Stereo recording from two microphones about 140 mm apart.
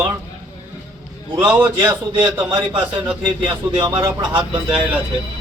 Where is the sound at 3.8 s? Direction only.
25° right (ahead or behind).